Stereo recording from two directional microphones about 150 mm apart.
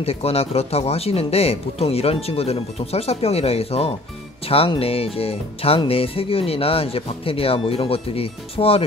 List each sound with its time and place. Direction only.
0.0 s speech: 45° left (ahead or behind)